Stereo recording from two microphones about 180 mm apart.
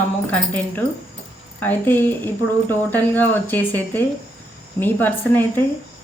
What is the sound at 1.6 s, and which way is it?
Speech, 10° left (ahead or behind).